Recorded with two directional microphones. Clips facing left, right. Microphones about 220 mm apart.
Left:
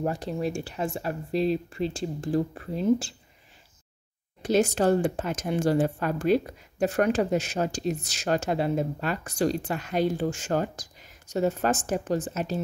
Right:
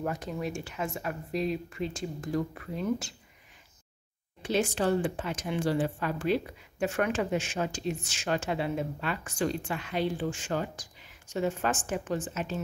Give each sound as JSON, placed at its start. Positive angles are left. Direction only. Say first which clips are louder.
{"t": 0.0, "sound": "speech", "louder": "left 5 dB", "side_deg": 30}
{"t": 4.4, "sound": "speech", "louder": "left 5 dB", "side_deg": 40}